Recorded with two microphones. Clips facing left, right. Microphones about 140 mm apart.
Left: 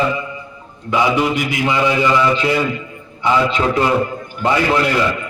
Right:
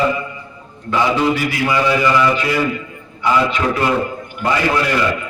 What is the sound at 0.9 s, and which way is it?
A man's voice, 15° left (ahead or behind).